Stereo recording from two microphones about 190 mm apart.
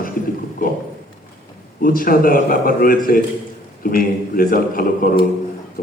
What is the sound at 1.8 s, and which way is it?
Speech, 50° left (ahead or behind).